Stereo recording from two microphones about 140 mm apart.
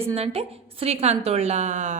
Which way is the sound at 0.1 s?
45° right (ahead or behind).